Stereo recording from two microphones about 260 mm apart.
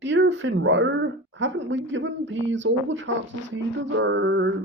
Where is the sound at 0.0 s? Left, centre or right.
Right.